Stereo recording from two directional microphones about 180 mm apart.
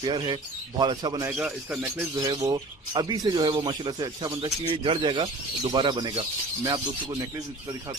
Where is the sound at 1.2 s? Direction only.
5° right (ahead or behind).